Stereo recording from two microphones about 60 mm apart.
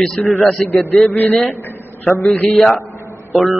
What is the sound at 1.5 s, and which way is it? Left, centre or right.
Speech, left.